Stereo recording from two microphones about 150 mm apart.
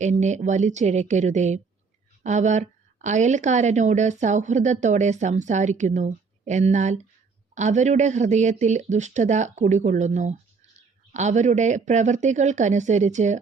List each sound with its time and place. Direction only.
0.0 s a woman's voice: 50° right (ahead or behind)